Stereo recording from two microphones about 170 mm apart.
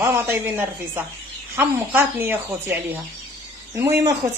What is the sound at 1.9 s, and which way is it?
Speech, 15° right (ahead or behind).